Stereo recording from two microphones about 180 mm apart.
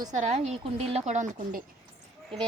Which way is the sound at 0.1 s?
40° right (ahead or behind).